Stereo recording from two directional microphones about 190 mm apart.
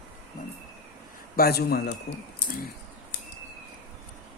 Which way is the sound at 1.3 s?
55° left (ahead or behind).